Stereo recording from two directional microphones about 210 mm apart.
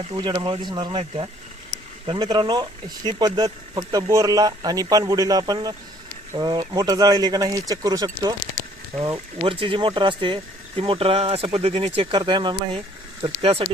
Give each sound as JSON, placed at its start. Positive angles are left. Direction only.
{"t": 0.1, "sound": "speech", "side_deg": -20}